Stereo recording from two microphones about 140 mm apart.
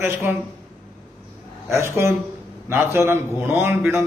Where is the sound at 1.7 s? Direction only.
20° right (ahead or behind).